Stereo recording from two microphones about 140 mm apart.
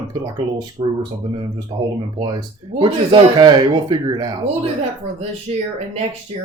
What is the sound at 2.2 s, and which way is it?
Speech, 35° right (ahead or behind).